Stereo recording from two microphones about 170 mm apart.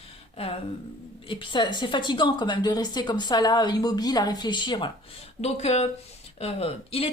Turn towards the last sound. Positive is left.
turn(degrees=35)  # may be behind; listen again after turning